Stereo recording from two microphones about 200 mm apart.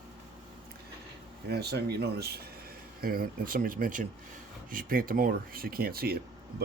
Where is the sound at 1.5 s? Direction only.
55° right (ahead or behind).